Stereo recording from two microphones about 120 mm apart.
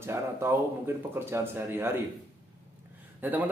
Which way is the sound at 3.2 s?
15° right (ahead or behind).